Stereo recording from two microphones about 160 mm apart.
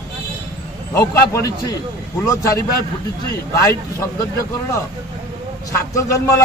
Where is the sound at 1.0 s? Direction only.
20° left (ahead or behind).